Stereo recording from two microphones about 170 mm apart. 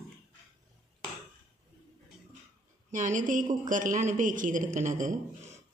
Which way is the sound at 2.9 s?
50° right (ahead or behind).